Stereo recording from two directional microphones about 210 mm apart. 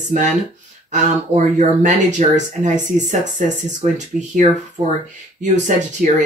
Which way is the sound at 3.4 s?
35° right (ahead or behind).